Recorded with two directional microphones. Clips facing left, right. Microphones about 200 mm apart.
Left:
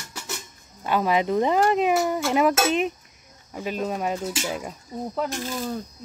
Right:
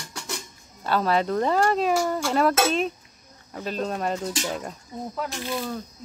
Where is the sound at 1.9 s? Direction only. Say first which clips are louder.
Left 1 dB; 5° left (ahead or behind).